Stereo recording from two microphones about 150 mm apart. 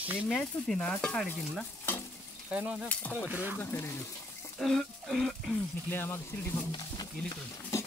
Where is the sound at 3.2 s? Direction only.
10° right (ahead or behind).